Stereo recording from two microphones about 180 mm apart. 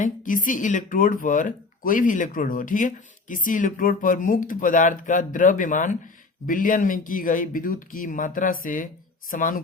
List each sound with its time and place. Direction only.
0.0 s speech: 45° left (ahead or behind)